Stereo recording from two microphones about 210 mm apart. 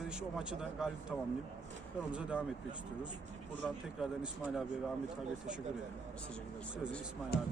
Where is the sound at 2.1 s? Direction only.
5° right (ahead or behind).